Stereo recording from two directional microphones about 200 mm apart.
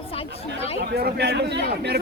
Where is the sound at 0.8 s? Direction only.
50° right (ahead or behind).